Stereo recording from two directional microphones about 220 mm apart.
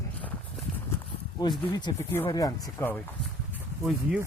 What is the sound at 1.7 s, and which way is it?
Speech, 15° left (ahead or behind).